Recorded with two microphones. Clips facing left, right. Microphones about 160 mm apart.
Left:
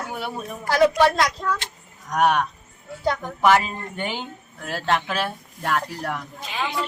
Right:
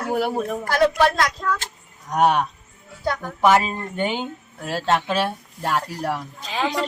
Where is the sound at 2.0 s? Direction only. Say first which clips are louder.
Right 2 dB; 25° right (ahead or behind).